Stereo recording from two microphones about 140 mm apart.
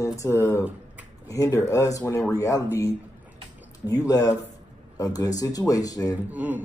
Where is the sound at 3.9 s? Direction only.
25° left (ahead or behind).